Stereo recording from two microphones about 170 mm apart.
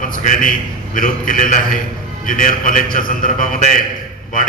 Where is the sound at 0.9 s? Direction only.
55° left (ahead or behind).